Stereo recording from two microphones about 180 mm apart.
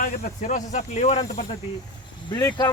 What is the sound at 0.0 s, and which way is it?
Speech, 50° left (ahead or behind).